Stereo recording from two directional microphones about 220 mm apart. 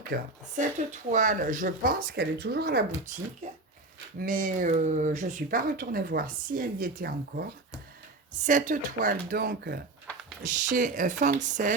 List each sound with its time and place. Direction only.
0.1 s speech: 35° right (ahead or behind)
4.2 s speech: 40° right (ahead or behind)
8.4 s speech: 35° right (ahead or behind)